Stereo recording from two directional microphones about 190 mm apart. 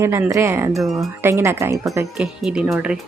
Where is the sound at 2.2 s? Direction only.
5° right (ahead or behind).